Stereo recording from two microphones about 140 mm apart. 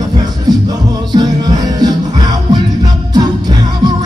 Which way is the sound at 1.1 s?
30° right (ahead or behind).